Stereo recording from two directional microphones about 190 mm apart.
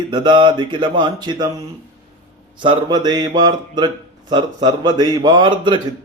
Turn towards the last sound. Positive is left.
turn(degrees=-20)  # may be behind; listen again after turning